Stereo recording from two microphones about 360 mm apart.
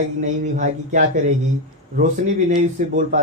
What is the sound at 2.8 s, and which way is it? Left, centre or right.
Speech, right.